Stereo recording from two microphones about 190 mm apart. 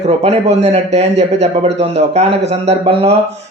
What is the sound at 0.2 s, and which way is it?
Speech, 35° right (ahead or behind).